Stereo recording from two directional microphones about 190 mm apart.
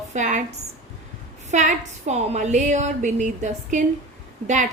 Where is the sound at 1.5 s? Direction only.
40° right (ahead or behind).